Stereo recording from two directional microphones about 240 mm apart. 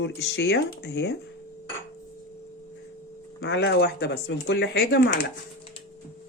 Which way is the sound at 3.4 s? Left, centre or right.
Left.